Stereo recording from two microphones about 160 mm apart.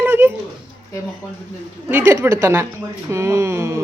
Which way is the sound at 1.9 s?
15° right (ahead or behind).